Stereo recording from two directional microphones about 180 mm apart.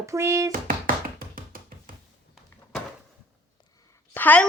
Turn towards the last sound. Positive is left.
turn(degrees=10)  # may be behind; listen again after turning